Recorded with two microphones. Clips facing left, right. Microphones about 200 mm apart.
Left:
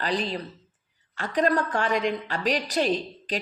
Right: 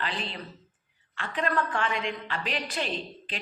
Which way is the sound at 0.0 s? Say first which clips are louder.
Left 7 dB; 40° left (ahead or behind).